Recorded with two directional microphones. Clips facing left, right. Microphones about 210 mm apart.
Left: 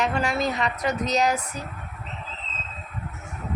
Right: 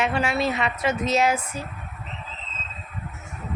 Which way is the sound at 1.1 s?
40° left (ahead or behind).